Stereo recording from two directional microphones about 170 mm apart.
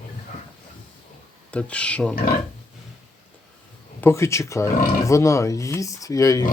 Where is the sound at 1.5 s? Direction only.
5° left (ahead or behind).